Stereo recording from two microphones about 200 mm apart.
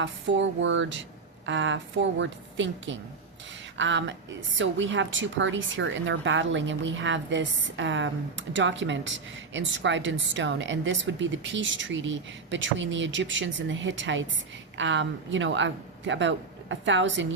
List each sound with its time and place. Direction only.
0.0 s a woman's voice: 65° right (ahead or behind)